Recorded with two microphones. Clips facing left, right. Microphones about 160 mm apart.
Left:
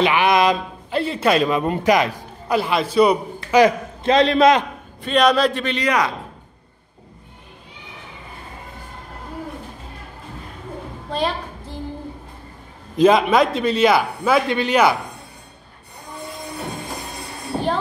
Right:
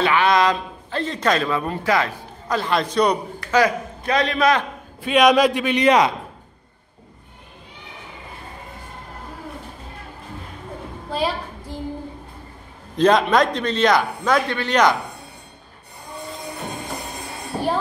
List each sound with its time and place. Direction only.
0.0 s a man's voice: 15° left (ahead or behind)
3.3 s a man's voice: 25° left (ahead or behind)
5.0 s a man's voice: 10° right (ahead or behind)
5.9 s speech: 25° right (ahead or behind)
11.1 s a sound: 5° right (ahead or behind)
12.9 s a man's voice: 5° left (ahead or behind)